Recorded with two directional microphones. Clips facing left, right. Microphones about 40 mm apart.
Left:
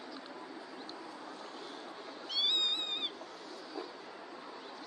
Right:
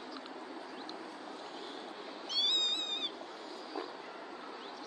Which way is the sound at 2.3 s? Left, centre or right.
Centre.